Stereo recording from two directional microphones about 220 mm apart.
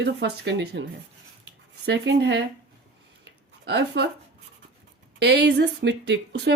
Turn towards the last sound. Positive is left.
turn(degrees=-50)  # may be behind; listen again after turning